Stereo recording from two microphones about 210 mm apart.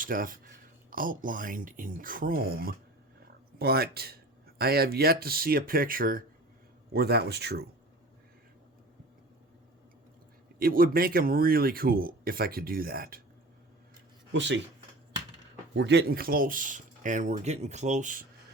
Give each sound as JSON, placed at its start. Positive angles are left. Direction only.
{"t": 0.0, "sound": "speech", "side_deg": -40}
{"t": 10.6, "sound": "speech", "side_deg": -45}
{"t": 14.3, "sound": "speech", "side_deg": -60}
{"t": 15.7, "sound": "speech", "side_deg": -55}